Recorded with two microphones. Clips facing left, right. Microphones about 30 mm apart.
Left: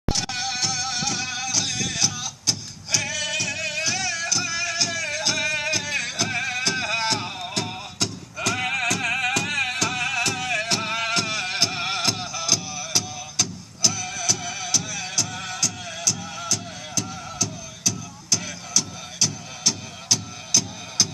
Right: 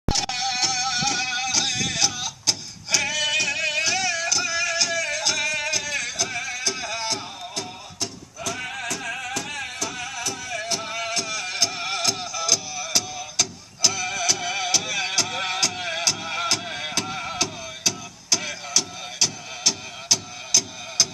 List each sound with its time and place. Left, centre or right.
0.1 s music: centre; by 7.7 s left
8.0 s music: left; by 17.2 s right
17.4 s music: right
17.8 s music: centre